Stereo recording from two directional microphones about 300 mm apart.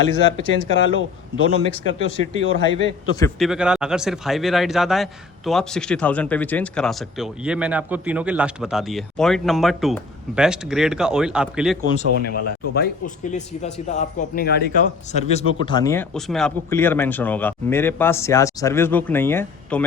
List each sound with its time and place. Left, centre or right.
0.2 s a man's voice: left
3.2 s speech: centre
11.9 s a man's voice: left; by 19.8 s centre